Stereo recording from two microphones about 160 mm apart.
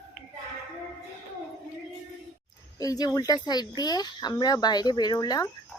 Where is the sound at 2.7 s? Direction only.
20° left (ahead or behind).